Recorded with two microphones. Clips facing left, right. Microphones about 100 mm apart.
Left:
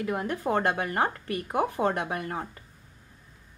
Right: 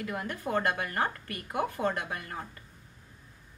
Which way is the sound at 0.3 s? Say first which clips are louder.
Left 2 dB; 20° left (ahead or behind).